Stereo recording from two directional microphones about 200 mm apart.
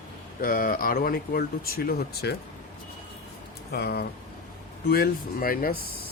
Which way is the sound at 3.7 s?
50° left (ahead or behind).